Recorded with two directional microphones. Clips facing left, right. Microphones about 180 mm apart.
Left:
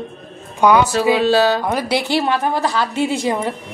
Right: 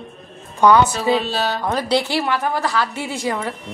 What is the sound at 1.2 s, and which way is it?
Speech, 90° left.